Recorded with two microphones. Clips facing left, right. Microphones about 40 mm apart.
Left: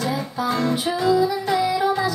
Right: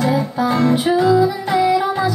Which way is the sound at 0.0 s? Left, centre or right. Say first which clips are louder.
Right 6 dB; right.